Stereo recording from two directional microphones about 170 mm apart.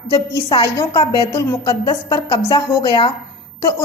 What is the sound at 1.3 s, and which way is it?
A woman's voice, 15° left (ahead or behind).